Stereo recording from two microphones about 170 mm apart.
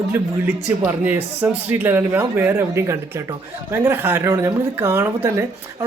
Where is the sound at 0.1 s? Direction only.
10° right (ahead or behind).